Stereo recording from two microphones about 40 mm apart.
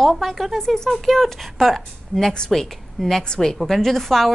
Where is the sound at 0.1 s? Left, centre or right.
Centre.